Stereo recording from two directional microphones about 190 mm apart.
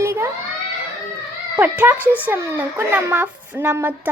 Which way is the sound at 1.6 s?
10° right (ahead or behind).